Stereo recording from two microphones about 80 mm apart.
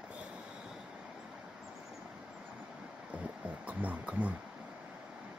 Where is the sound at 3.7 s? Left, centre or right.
Centre.